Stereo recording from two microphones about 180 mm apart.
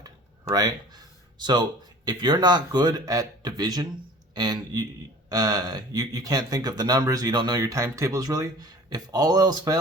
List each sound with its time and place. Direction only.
1.4 s speech: 25° right (ahead or behind)